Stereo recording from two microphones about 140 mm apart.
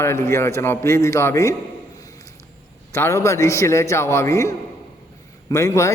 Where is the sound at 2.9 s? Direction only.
20° left (ahead or behind).